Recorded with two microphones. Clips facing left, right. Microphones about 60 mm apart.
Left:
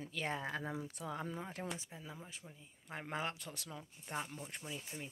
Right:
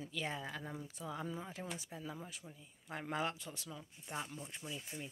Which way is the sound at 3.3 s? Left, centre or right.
Left.